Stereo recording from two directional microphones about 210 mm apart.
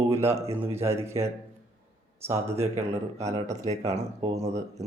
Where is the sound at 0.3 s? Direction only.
30° right (ahead or behind).